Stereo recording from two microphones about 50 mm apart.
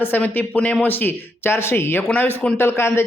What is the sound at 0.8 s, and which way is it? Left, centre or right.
A man's voice, left.